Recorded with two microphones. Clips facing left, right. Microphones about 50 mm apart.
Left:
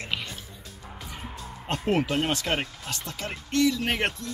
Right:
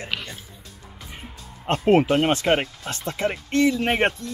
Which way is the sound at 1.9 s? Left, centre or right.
Right.